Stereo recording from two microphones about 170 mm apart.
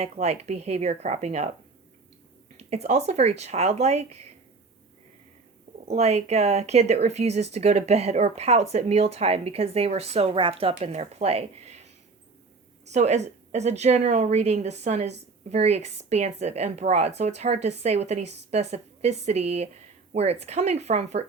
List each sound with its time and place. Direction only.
0.0 s a woman's voice: 40° right (ahead or behind)
2.6 s a woman's voice: 40° right (ahead or behind)
5.9 s a woman's voice: 40° right (ahead or behind)